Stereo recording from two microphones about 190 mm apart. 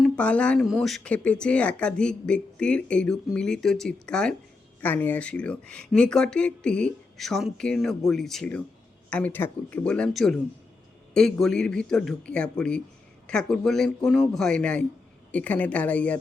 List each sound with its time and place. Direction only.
0.0 s a woman's voice: 5° left (ahead or behind)